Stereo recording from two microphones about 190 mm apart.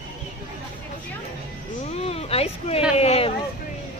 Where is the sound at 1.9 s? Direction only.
30° left (ahead or behind).